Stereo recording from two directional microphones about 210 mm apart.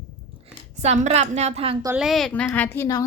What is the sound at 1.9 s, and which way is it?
A woman's voice, centre (ahead or behind).